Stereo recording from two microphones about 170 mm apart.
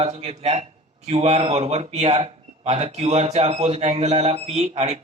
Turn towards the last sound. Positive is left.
turn(degrees=-40)  # may be behind; listen again after turning